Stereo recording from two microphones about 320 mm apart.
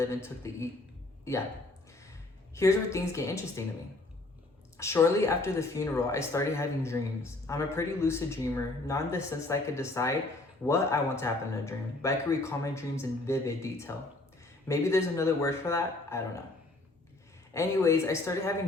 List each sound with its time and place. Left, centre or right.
0.0 s speech: centre
2.6 s speech: centre
4.8 s speech: centre
17.5 s speech: centre